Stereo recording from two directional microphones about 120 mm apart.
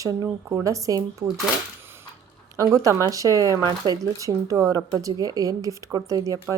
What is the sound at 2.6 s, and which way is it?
A woman's voice, 25° right (ahead or behind).